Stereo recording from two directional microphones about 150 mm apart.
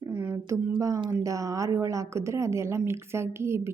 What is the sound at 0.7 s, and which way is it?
A woman's voice, 30° right (ahead or behind).